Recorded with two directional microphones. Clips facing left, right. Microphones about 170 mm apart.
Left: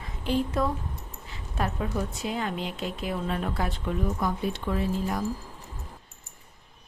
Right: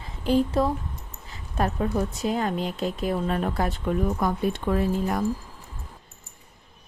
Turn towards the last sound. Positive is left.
turn(degrees=-55)  # may be behind; listen again after turning